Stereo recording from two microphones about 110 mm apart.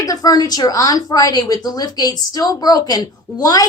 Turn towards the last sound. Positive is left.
turn(degrees=35)  # may be behind; listen again after turning